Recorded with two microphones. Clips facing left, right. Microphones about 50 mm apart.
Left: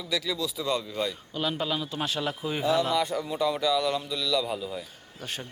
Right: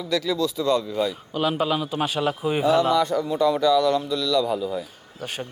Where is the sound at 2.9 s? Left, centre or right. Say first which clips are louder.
Right 6 dB; centre.